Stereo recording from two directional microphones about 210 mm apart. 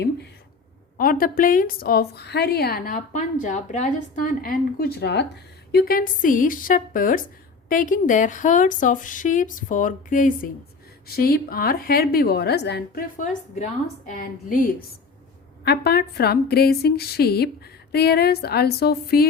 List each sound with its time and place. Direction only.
0.9 s a woman's voice: 45° left (ahead or behind)